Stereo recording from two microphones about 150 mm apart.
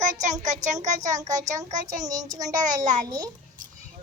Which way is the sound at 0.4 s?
55° right (ahead or behind).